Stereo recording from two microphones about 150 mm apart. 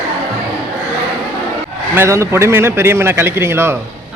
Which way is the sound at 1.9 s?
20° right (ahead or behind).